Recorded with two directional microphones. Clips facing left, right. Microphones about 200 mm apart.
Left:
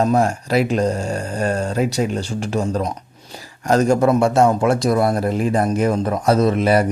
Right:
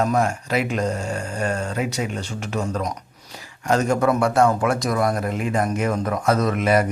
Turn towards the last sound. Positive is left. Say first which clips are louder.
# left 4 dB
turn(degrees=30)  # may be behind; listen again after turning